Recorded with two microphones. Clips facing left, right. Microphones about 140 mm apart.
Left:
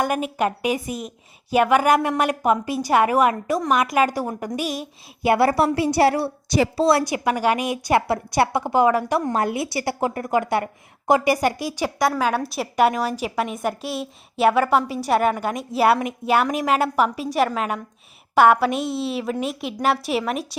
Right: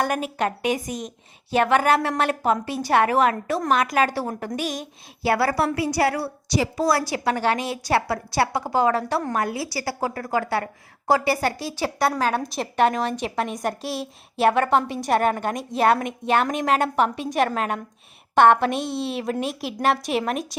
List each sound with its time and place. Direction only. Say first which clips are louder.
0.0 s a woman's voice: left 2 dB; 10° left (ahead or behind)
5.3 s a woman's voice: left 4 dB; 25° left (ahead or behind)
7.0 s a woman's voice: left 2 dB; 15° left (ahead or behind)